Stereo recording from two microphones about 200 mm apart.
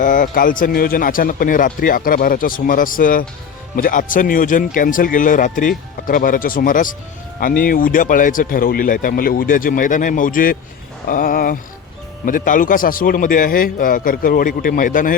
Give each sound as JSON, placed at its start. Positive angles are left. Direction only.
{"t": 0.0, "sound": "speech", "side_deg": 40}